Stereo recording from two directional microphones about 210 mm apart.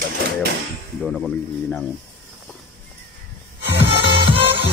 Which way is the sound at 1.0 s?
Centre (ahead or behind).